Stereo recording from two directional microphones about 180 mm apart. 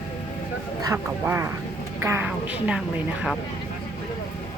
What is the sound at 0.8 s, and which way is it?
Speech, 15° right (ahead or behind).